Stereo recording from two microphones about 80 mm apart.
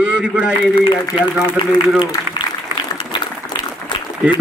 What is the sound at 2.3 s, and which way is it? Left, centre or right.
Applause, left.